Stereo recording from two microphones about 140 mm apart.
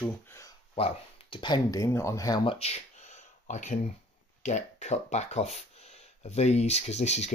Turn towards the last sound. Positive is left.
turn(degrees=55)  # may be behind; listen again after turning